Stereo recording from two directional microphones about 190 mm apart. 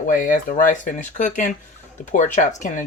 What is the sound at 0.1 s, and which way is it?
Speech, 45° left (ahead or behind).